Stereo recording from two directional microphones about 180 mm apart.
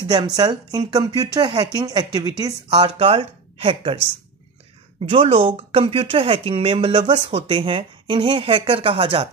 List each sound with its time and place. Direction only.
0.1 s speech: 25° right (ahead or behind)
5.1 s speech: 30° right (ahead or behind)